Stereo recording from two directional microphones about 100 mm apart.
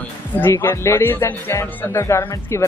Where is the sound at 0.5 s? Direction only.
30° left (ahead or behind).